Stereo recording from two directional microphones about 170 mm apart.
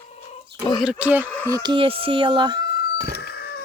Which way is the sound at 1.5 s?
25° right (ahead or behind).